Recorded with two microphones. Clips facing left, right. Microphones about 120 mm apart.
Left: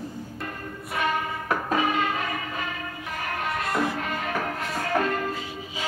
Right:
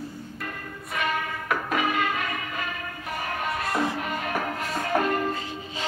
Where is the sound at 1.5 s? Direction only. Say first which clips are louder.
Left 1 dB; 30° left (ahead or behind).